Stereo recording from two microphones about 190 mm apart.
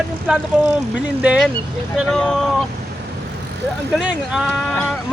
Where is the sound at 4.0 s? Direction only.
Centre (ahead or behind).